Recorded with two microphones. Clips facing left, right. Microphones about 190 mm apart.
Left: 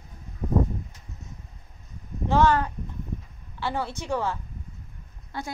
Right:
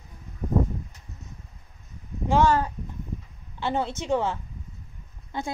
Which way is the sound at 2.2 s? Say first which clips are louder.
Even; 15° right (ahead or behind).